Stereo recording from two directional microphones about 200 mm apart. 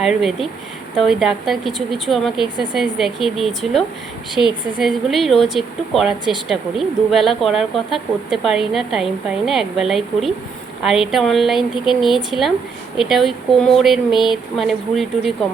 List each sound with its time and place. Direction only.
0.0 s speech: centre (ahead or behind)